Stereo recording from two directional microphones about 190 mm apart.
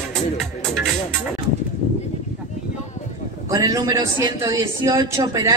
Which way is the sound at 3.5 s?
15° right (ahead or behind).